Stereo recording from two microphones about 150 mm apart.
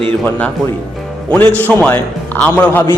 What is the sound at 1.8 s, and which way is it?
A man's voice, 10° left (ahead or behind).